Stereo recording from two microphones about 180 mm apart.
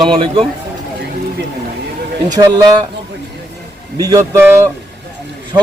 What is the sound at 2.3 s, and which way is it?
Speech, 20° right (ahead or behind).